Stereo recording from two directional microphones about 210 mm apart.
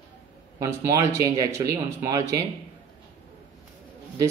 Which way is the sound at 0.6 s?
15° right (ahead or behind).